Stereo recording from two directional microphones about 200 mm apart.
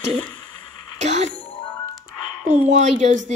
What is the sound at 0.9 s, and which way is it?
Speech, 35° right (ahead or behind).